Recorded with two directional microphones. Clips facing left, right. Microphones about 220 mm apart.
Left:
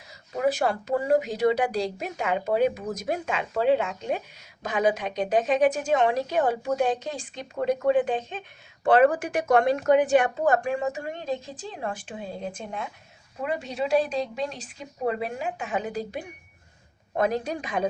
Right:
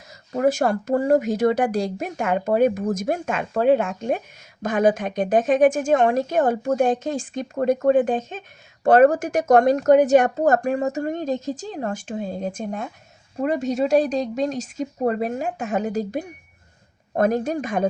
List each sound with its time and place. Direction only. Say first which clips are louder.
0.3 s a woman's voice: right 5 dB; 45° right (ahead or behind)